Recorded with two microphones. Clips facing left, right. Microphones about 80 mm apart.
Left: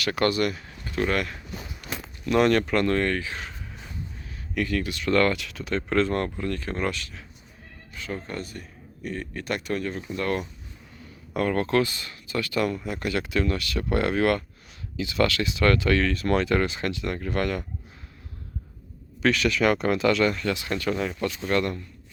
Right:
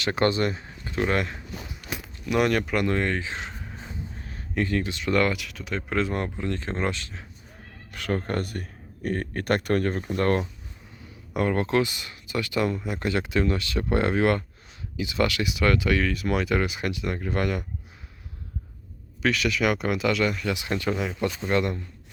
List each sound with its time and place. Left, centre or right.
0.0 s speech: right
1.9 s speech: centre; by 7.3 s right
7.9 s speech: right
11.3 s speech: right
19.2 s speech: centre
20.5 s speech: centre